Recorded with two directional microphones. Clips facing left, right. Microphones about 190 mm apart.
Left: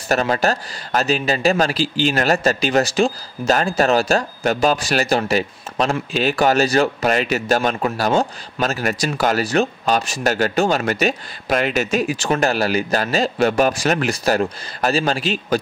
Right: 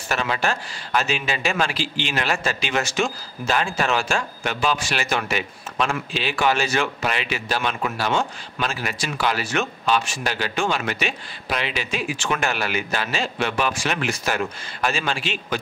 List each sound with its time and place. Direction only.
0.1 s speech: 40° left (ahead or behind)